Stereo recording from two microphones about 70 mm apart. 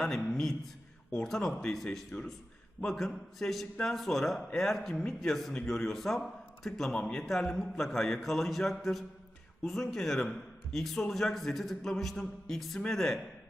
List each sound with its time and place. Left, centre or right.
0.0 s a man's voice: centre